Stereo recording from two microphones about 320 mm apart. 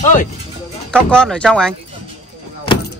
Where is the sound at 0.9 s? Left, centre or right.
Centre.